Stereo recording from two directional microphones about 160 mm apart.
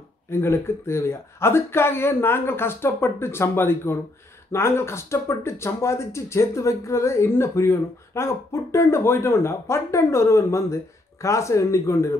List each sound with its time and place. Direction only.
0.3 s speech: 15° left (ahead or behind)